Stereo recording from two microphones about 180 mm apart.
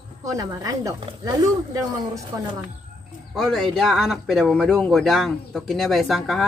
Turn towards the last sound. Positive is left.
turn(degrees=0)  # may be behind; listen again after turning